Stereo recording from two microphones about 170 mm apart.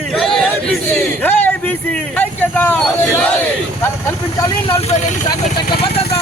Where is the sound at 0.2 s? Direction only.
Centre (ahead or behind).